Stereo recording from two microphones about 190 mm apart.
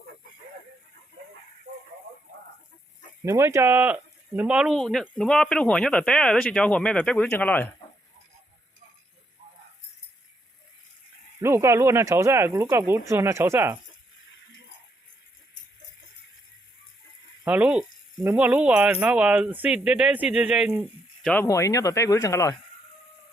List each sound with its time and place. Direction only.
3.2 s speech: 15° right (ahead or behind); by 7.7 s 10° left (ahead or behind)
11.3 s speech: 15° right (ahead or behind)
17.4 s speech: 5° right (ahead or behind)
21.4 s speech: 15° left (ahead or behind)